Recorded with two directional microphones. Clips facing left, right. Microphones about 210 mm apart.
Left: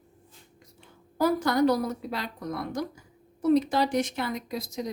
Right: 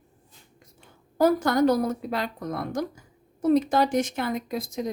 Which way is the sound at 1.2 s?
50° right (ahead or behind).